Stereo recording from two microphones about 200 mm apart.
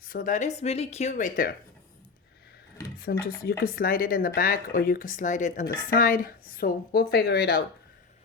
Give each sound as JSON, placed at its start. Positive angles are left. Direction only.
{"t": 0.0, "sound": "speech", "side_deg": 45}
{"t": 3.0, "sound": "speech", "side_deg": 50}